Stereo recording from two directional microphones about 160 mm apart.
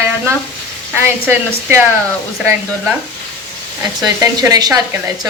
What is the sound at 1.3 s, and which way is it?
Speech, 10° right (ahead or behind).